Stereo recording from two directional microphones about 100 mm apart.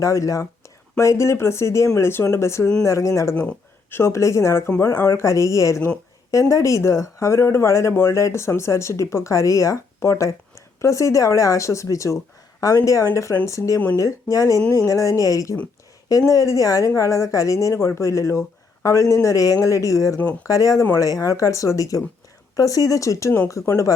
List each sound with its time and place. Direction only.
0.0 s speech: 35° left (ahead or behind)
3.3 s speech: 15° left (ahead or behind)